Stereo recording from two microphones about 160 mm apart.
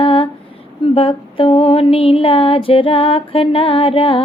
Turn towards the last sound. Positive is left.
turn(degrees=35)  # may be behind; listen again after turning